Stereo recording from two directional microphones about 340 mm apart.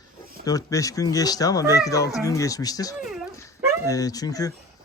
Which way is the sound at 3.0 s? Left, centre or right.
Centre.